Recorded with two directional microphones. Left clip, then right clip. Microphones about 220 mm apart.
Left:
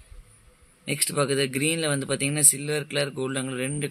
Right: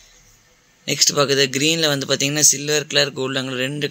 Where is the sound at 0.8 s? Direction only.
Centre (ahead or behind).